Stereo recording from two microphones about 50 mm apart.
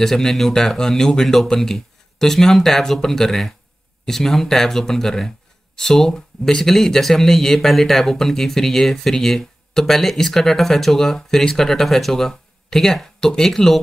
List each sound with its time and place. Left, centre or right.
0.0 s speech: centre